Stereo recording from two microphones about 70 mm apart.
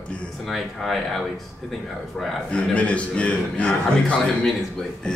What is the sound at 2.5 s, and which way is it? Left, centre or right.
A man's voice, centre.